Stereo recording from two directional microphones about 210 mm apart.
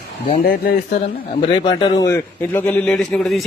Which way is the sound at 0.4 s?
50° left (ahead or behind).